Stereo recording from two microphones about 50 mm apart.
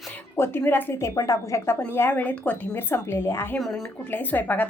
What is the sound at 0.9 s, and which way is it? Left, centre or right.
Speech, left.